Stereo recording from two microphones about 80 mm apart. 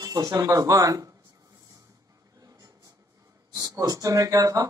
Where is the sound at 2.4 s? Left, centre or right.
Right.